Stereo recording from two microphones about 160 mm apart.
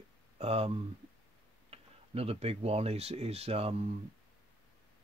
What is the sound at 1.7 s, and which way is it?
Speech, 40° right (ahead or behind).